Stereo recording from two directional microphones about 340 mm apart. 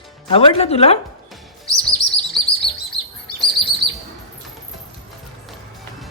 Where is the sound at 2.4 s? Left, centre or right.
Centre.